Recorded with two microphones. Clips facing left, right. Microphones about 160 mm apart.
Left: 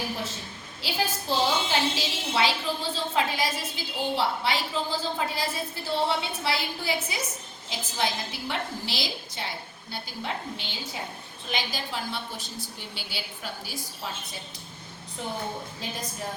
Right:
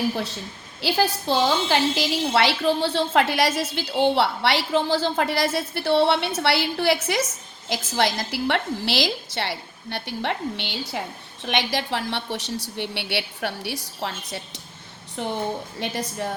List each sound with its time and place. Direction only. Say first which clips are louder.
0.8 s a woman's voice: right 8 dB; 70° right (ahead or behind)